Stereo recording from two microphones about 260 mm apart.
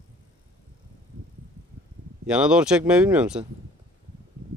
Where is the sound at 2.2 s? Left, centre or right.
Centre.